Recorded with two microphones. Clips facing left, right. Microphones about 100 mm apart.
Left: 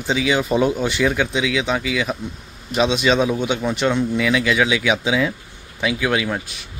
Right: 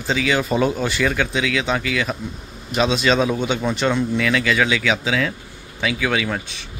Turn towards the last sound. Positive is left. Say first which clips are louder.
# left 1 dB
turn(degrees=5)  # may be behind; listen again after turning